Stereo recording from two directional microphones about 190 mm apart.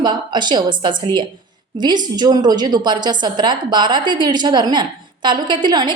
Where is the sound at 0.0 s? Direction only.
25° right (ahead or behind).